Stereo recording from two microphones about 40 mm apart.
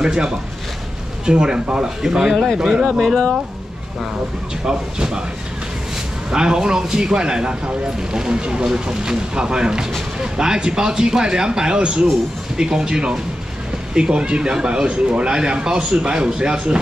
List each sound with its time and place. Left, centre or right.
0.0 s speech: centre
4.6 s speech: centre
6.3 s speech: centre